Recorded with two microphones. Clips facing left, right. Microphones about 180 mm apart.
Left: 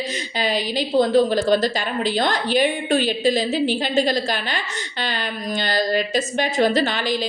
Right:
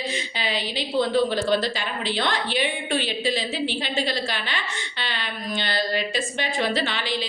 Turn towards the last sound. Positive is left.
turn(degrees=45)  # may be behind; listen again after turning